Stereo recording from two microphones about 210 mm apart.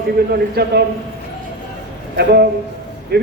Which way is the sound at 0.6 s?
50° right (ahead or behind).